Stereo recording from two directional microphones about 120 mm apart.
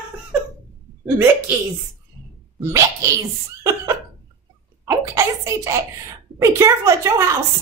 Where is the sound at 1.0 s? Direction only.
20° right (ahead or behind).